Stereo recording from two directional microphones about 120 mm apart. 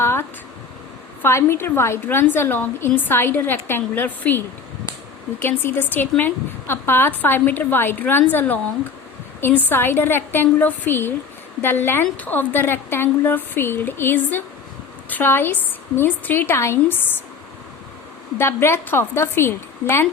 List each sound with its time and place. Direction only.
0.0 s a sound: 20° left (ahead or behind)
1.2 s a woman's voice: 20° left (ahead or behind)
9.6 s a woman's voice: 15° left (ahead or behind)
18.3 s a woman's voice: 20° left (ahead or behind)